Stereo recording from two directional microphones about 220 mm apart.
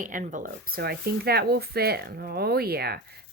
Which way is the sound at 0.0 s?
35° right (ahead or behind).